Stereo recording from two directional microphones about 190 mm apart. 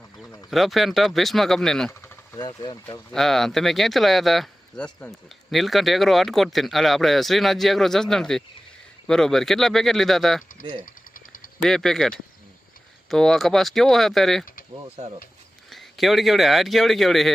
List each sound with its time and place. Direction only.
0.5 s speech: centre (ahead or behind)
1.9 s speech: 15° left (ahead or behind)
3.1 s speech: centre (ahead or behind)
10.8 s a sound: 45° left (ahead or behind)
11.6 s speech: centre (ahead or behind)
14.8 s speech: 30° right (ahead or behind)
15.7 s speech: centre (ahead or behind)